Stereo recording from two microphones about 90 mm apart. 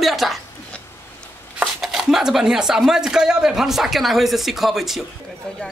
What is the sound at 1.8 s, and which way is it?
Speech, 5° right (ahead or behind).